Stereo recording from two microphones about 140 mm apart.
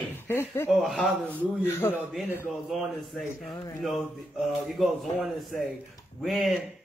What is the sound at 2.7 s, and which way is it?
A man's voice, centre (ahead or behind).